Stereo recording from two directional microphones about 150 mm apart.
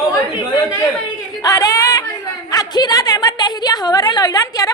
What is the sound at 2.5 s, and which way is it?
A woman's voice, 25° left (ahead or behind).